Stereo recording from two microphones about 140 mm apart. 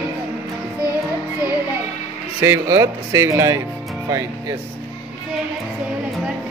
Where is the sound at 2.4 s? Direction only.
20° right (ahead or behind).